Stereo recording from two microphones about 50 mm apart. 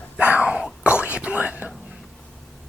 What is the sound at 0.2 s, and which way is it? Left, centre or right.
Wail, right.